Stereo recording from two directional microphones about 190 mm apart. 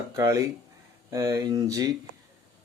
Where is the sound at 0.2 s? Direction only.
15° right (ahead or behind).